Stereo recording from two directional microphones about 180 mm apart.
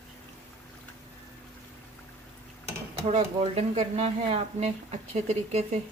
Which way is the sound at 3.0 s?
35° right (ahead or behind).